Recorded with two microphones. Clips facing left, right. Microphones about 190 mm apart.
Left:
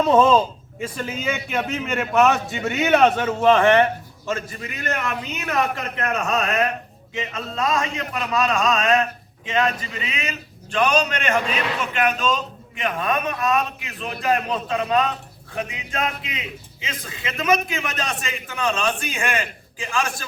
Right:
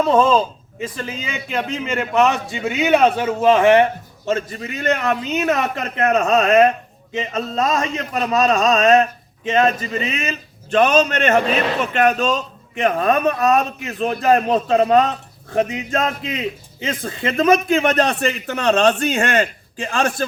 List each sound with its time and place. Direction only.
0.2 s speech: 15° left (ahead or behind)
0.8 s a man's voice: 5° left (ahead or behind); by 3.8 s 15° right (ahead or behind)
4.3 s a man's voice: 30° right (ahead or behind); by 17.2 s 50° right (ahead or behind)
17.8 s a man's voice: 65° right (ahead or behind)